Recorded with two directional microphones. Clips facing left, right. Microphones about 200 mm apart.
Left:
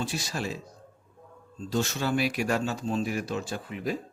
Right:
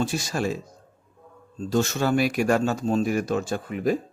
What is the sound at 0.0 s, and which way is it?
Speech, 45° right (ahead or behind).